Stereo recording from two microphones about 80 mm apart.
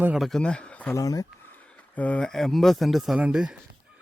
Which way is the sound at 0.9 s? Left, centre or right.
Left.